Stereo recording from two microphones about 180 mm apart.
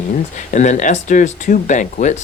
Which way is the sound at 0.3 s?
45° left (ahead or behind).